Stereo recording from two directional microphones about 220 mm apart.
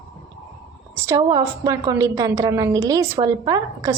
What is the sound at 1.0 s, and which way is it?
A woman's voice, 15° right (ahead or behind).